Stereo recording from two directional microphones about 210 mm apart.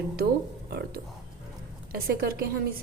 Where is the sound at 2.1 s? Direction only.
50° right (ahead or behind).